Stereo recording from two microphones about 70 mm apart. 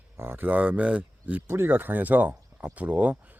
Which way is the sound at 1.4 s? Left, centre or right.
Right.